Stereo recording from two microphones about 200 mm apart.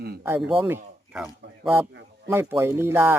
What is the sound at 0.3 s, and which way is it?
A man's voice, 10° right (ahead or behind).